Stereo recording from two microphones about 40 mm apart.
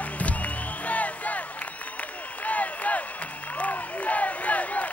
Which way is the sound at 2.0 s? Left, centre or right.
Left.